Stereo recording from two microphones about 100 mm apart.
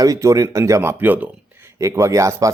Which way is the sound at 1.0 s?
20° right (ahead or behind).